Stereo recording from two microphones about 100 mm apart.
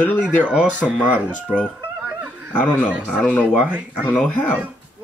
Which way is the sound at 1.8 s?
15° right (ahead or behind).